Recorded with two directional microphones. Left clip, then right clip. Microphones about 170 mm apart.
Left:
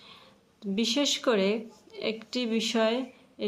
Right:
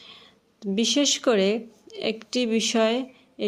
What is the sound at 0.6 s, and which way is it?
A woman's voice, 30° right (ahead or behind).